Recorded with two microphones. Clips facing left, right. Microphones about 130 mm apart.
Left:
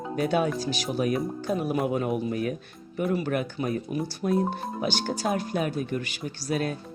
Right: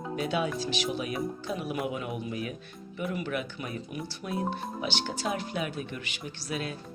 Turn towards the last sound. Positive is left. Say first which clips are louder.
# left 6 dB
turn(degrees=45)  # may be behind; listen again after turning